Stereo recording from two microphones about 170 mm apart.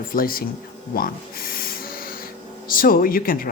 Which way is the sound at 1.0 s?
60° left (ahead or behind).